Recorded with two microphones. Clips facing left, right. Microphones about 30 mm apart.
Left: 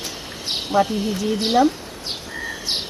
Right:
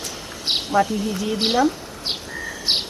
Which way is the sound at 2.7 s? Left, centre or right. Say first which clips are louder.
Right 5 dB; right.